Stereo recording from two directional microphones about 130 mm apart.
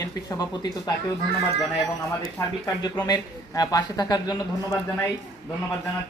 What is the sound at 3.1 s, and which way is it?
Speech, 30° left (ahead or behind).